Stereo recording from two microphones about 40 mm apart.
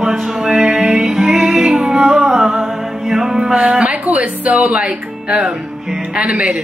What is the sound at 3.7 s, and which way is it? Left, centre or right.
A woman's voice, right.